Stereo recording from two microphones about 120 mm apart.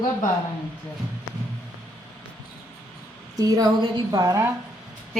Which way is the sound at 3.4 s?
30° right (ahead or behind).